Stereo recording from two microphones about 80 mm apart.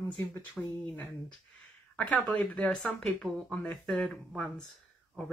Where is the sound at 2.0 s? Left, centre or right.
Centre.